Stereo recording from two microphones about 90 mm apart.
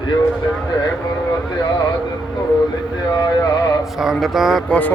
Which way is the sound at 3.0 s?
50° left (ahead or behind).